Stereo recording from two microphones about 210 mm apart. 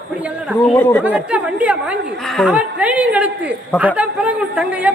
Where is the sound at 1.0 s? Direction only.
5° right (ahead or behind).